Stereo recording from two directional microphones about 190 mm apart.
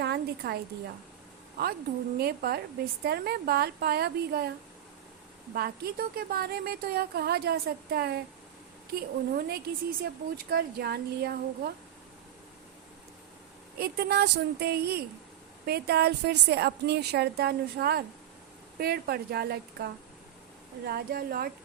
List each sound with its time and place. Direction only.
0.0 s a sound: 60° right (ahead or behind)
2.1 s a woman's voice: 55° right (ahead or behind)
5.5 s a woman's voice: 55° right (ahead or behind)
13.7 s a woman's voice: 55° right (ahead or behind)